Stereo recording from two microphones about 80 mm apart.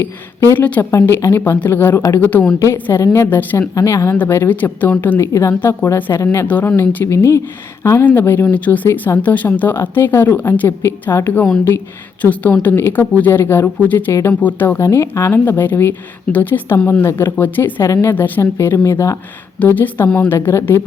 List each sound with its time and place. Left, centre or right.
0.5 s a woman's voice: left
0.9 s a woman's voice: left
3.0 s speech: left
3.2 s a woman's voice: left
3.8 s speech: left
4.2 s a woman's voice: left
14.1 s speech: left
14.4 s a woman's voice: left
14.8 s a woman's voice: left
19.5 s a woman's voice: left